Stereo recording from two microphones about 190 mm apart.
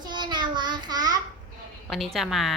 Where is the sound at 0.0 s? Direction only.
20° right (ahead or behind).